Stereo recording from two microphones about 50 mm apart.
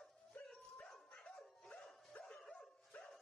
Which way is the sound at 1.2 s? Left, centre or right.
Left.